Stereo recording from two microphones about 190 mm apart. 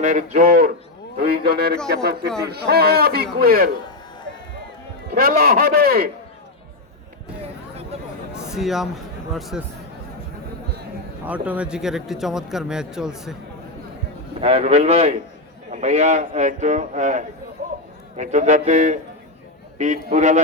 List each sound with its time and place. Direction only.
0.0 s a man's voice: 40° right (ahead or behind)
5.1 s a man's voice: 50° right (ahead or behind)
8.3 s a sound: 5° right (ahead or behind)
9.3 s speech: centre (ahead or behind)
11.3 s speech: 5° right (ahead or behind)
14.4 s a man's voice: 30° right (ahead or behind)